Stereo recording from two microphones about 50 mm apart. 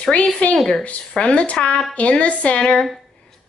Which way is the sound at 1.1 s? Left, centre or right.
Left.